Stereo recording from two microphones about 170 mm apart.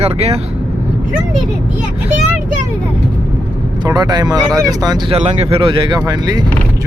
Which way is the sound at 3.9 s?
20° right (ahead or behind).